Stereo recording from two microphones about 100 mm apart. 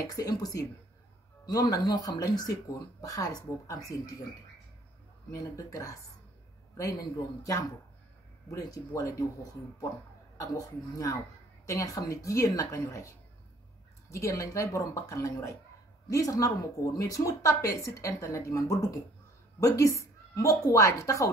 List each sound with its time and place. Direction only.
0.0 s speech: 35° left (ahead or behind)
5.3 s speech: 30° left (ahead or behind)
14.1 s speech: 30° left (ahead or behind)